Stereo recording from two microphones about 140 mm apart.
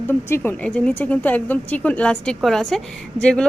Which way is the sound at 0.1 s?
15° left (ahead or behind).